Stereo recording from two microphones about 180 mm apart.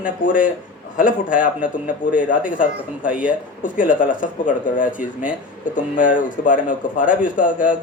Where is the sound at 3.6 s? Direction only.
45° left (ahead or behind).